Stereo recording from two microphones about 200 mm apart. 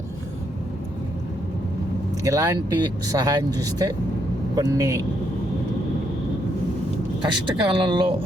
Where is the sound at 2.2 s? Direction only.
15° right (ahead or behind).